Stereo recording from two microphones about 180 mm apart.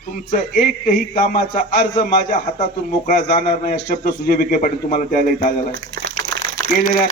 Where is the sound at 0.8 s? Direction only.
50° left (ahead or behind).